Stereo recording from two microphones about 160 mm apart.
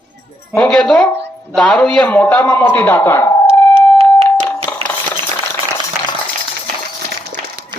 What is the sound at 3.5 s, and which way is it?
Music, 35° right (ahead or behind).